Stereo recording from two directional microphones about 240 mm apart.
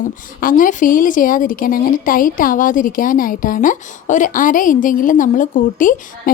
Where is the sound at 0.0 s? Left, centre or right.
Left.